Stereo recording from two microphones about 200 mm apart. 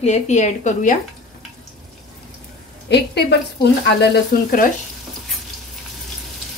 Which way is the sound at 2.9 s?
55° left (ahead or behind).